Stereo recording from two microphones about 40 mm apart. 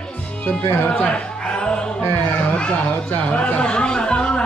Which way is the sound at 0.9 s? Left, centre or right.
Left.